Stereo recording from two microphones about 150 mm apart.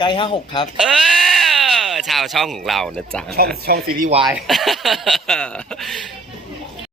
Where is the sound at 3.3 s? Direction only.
90° right.